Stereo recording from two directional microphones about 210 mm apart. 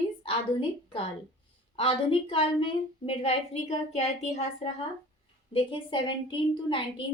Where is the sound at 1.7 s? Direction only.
25° left (ahead or behind).